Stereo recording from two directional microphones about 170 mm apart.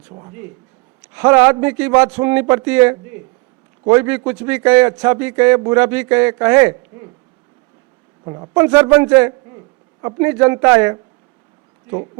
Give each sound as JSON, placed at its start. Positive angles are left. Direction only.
{"t": 0.1, "sound": "speech", "side_deg": -25}
{"t": 1.1, "sound": "a man's voice", "side_deg": -10}
{"t": 8.2, "sound": "speech", "side_deg": -25}
{"t": 8.5, "sound": "a man's voice", "side_deg": -10}